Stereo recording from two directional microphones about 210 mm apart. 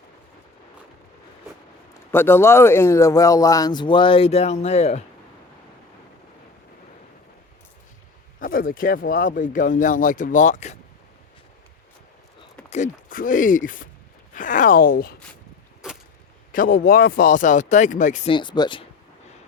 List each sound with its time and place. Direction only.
2.1 s speech: 10° left (ahead or behind); by 5.0 s 30° left (ahead or behind)
8.4 s speech: 40° left (ahead or behind)
12.7 s speech: 40° left (ahead or behind)
16.5 s speech: 40° left (ahead or behind)
18.3 s speech: 20° left (ahead or behind)